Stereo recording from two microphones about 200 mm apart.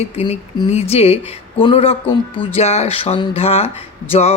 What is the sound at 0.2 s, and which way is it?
Speech, 30° left (ahead or behind).